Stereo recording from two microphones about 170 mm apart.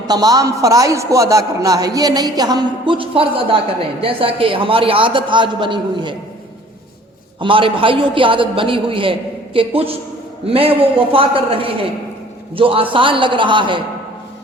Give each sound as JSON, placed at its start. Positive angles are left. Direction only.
{"t": 0.1, "sound": "a man's voice", "side_deg": -20}
{"t": 7.3, "sound": "a man's voice", "side_deg": -30}